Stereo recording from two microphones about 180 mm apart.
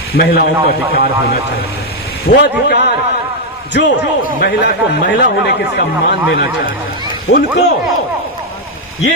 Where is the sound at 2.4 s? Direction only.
65° left (ahead or behind).